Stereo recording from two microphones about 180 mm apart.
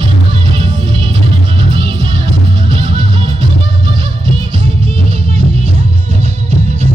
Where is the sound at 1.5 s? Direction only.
30° right (ahead or behind).